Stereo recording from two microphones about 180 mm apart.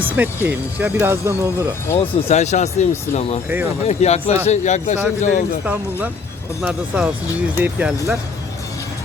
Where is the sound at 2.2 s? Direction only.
40° left (ahead or behind).